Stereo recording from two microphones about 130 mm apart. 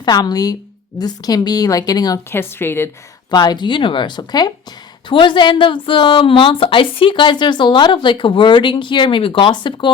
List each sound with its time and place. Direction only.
0.0 s a woman's voice: 30° left (ahead or behind)
2.3 s a woman's voice: 20° left (ahead or behind)
3.2 s a woman's voice: 35° left (ahead or behind)